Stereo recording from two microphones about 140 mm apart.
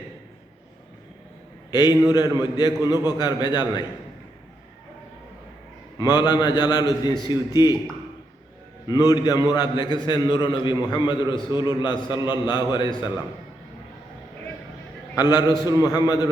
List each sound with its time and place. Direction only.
1.7 s a man's voice: 30° left (ahead or behind)
6.0 s a man's voice: 30° left (ahead or behind)
8.9 s a man's voice: 30° left (ahead or behind)
15.1 s a man's voice: 30° left (ahead or behind)